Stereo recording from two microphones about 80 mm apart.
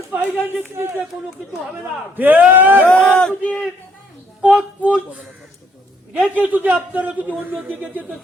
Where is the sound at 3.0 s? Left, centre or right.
Centre.